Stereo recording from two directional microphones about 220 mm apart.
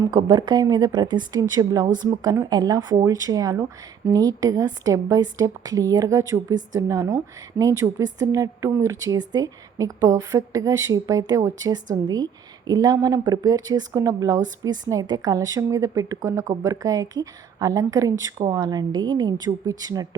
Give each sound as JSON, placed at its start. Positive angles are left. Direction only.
{"t": 0.0, "sound": "speech", "side_deg": -15}